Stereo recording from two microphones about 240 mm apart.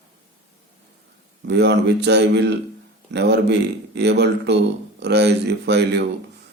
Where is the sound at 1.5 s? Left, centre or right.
Right.